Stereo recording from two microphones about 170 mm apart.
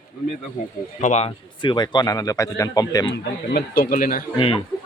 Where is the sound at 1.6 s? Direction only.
25° left (ahead or behind).